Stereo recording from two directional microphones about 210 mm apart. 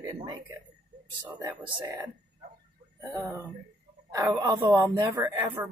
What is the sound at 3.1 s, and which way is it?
Speech, 15° right (ahead or behind).